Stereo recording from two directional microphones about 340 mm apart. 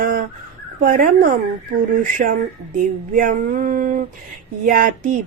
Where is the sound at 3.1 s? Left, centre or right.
Right.